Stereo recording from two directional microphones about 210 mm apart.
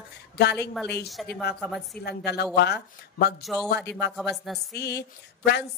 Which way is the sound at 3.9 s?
50° left (ahead or behind).